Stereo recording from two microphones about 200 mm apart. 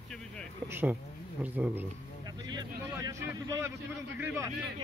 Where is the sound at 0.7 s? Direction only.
10° right (ahead or behind).